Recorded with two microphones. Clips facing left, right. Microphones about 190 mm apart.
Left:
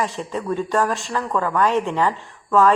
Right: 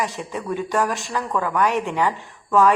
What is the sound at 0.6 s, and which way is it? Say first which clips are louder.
Speech: even; centre (ahead or behind).